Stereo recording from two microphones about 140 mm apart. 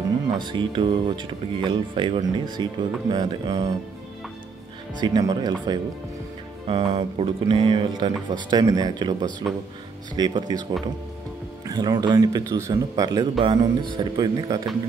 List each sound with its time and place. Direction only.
0.4 s speech: 35° right (ahead or behind)
4.9 s speech: 30° right (ahead or behind)